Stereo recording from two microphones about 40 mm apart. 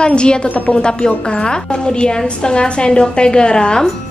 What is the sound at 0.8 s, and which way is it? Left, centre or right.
A woman's voice, left.